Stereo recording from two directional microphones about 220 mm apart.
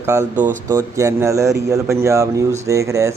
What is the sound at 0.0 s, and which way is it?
Speech, 15° right (ahead or behind).